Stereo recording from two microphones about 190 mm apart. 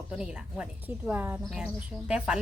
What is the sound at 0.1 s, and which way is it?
A woman's voice, 5° right (ahead or behind).